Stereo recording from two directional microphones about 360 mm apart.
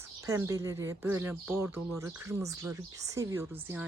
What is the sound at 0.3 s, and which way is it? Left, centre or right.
Speech, centre.